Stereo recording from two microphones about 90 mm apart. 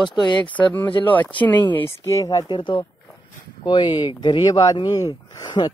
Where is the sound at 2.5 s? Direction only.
60° left (ahead or behind).